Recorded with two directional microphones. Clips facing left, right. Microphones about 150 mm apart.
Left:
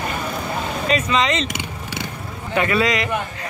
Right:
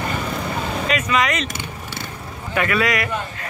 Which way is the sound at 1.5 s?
15° left (ahead or behind).